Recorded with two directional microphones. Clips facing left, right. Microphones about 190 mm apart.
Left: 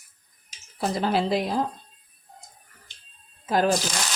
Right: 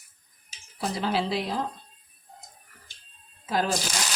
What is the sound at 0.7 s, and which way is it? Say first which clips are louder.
Speech: left 3 dB; 45° left (ahead or behind).